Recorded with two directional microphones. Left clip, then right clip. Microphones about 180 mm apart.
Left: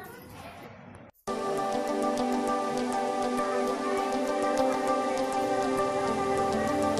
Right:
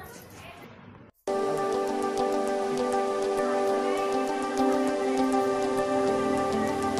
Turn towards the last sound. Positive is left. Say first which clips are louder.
# even
turn(degrees=0)  # may be behind; listen again after turning